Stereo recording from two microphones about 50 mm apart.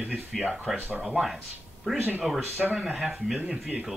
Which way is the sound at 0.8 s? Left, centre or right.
Right.